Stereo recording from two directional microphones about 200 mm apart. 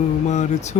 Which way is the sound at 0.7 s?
35° left (ahead or behind).